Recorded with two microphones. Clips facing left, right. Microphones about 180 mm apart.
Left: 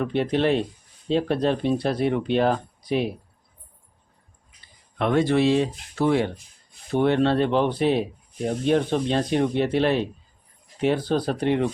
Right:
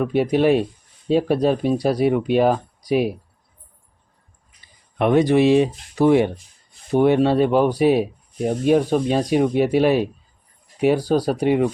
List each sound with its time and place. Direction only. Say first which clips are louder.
0.0 s speech: right 5 dB; 10° right (ahead or behind)
4.9 s speech: right 5 dB; 15° right (ahead or behind)